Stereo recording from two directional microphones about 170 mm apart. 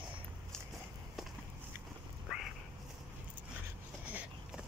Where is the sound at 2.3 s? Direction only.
5° right (ahead or behind).